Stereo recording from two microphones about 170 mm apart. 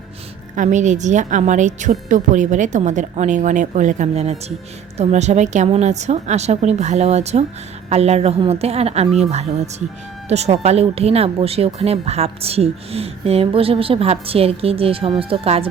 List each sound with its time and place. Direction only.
0.5 s a woman's voice: 45° right (ahead or behind)